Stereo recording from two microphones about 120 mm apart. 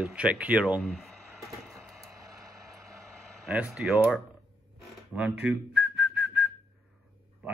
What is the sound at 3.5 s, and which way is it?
Speech, 5° right (ahead or behind).